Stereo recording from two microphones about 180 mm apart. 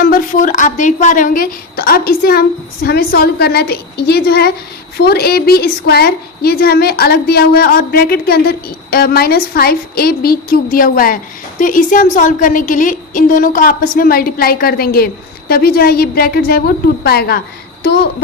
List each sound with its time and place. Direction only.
0.0 s a woman's voice: 50° left (ahead or behind)